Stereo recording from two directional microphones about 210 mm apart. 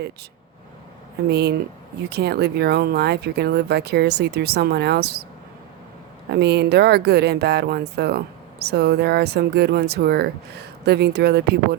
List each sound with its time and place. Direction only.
1.3 s speech: 50° right (ahead or behind)
6.3 s speech: 50° right (ahead or behind)